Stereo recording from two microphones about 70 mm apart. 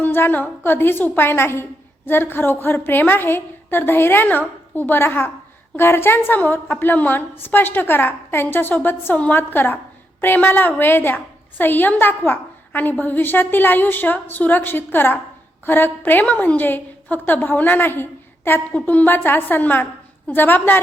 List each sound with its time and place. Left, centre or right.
0.0 s a woman's voice: left